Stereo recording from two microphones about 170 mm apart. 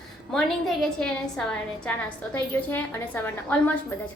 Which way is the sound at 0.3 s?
5° left (ahead or behind).